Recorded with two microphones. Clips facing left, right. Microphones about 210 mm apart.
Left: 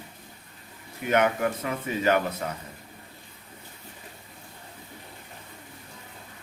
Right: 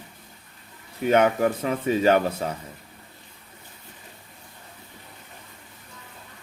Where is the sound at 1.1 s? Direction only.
30° right (ahead or behind).